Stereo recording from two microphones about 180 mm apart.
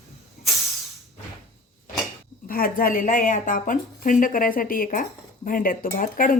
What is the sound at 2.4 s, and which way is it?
A woman's voice, 55° left (ahead or behind).